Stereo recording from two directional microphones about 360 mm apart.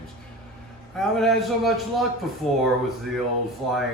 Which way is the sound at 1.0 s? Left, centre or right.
Centre.